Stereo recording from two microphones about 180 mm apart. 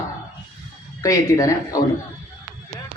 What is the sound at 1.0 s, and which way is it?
Speech, 20° left (ahead or behind).